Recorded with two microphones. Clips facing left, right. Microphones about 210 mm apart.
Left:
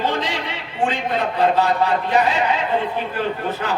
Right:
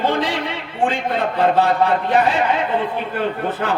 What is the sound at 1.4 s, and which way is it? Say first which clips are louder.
Speech: right 2 dB; 55° right (ahead or behind).